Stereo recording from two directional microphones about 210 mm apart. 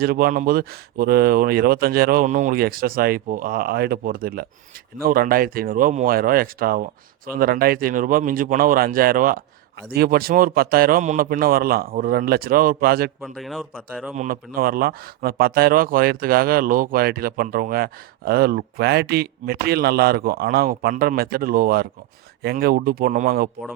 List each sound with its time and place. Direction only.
0.0 s speech: 45° right (ahead or behind)
13.2 s speech: centre (ahead or behind)
14.2 s speech: 40° right (ahead or behind)